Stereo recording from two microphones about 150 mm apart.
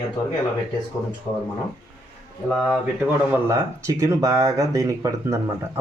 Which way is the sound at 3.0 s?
20° right (ahead or behind).